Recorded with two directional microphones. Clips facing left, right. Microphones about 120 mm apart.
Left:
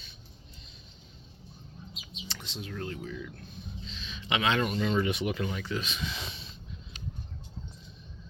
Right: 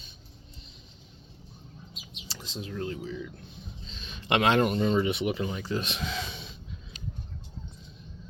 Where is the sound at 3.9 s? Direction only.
50° right (ahead or behind).